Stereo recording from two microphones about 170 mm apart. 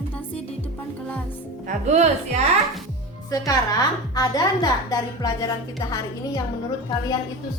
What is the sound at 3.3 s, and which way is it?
A woman's voice, 20° left (ahead or behind).